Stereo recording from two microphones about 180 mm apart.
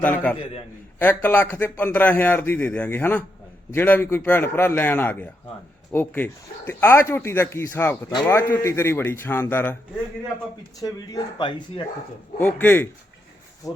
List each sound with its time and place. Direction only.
0.0 s a man's voice: 10° left (ahead or behind)
10.8 s speech: 20° left (ahead or behind)
12.4 s a man's voice: 10° left (ahead or behind)